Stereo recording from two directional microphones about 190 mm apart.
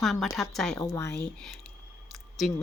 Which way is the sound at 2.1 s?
Centre (ahead or behind).